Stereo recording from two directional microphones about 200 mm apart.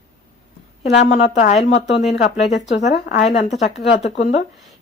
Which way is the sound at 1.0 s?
35° left (ahead or behind).